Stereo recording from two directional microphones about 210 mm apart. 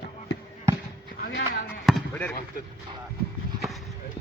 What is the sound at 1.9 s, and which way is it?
Basketball bounce, 5° left (ahead or behind).